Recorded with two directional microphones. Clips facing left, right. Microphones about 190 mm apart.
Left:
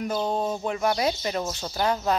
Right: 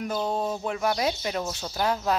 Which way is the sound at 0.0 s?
Centre (ahead or behind).